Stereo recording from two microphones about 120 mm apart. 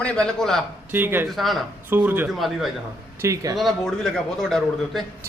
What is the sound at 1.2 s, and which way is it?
Speech, centre (ahead or behind).